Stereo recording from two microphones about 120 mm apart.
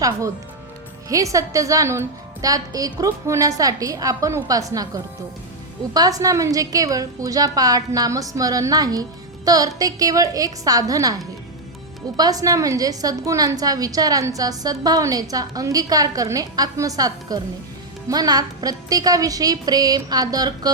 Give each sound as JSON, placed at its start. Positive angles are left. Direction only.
{"t": 1.1, "sound": "a woman's voice", "side_deg": -25}
{"t": 5.9, "sound": "a woman's voice", "side_deg": -30}